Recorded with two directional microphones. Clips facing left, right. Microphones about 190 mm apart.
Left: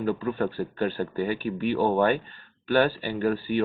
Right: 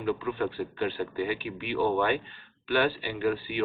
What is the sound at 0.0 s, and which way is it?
Speech, 40° left (ahead or behind).